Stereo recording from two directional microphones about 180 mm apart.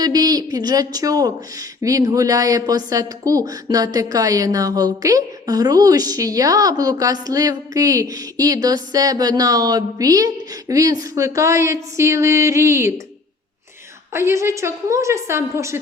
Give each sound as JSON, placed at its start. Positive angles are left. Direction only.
{"t": 0.0, "sound": "speech", "side_deg": -20}
{"t": 14.1, "sound": "a woman's voice", "side_deg": -15}